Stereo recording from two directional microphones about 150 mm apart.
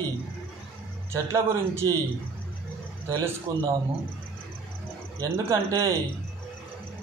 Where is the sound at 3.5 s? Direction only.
15° right (ahead or behind).